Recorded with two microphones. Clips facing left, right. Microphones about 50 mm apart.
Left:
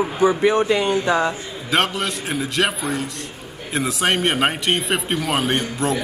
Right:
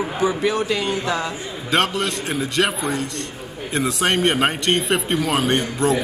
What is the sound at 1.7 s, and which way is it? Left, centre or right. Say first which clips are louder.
A man's voice: even; centre.